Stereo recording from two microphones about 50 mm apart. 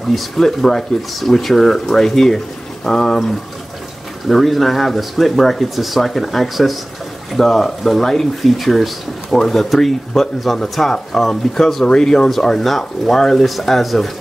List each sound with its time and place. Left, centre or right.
0.1 s speech: centre
12.4 s speech: centre